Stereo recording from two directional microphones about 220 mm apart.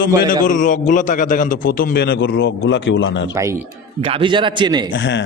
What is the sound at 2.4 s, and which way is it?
Speech, 60° left (ahead or behind).